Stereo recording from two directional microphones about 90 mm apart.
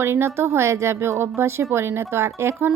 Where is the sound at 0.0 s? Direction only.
25° right (ahead or behind).